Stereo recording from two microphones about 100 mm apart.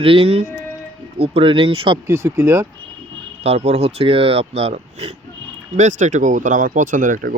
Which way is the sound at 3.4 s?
90° right.